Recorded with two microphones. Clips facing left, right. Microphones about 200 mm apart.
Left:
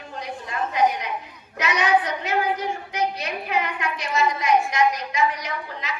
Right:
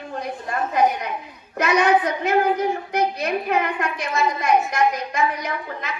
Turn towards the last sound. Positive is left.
turn(degrees=-55)  # may be behind; listen again after turning